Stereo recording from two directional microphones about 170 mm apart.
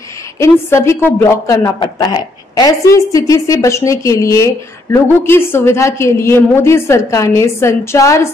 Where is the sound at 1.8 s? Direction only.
25° left (ahead or behind).